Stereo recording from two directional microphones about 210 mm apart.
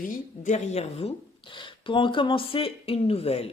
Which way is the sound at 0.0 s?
40° left (ahead or behind).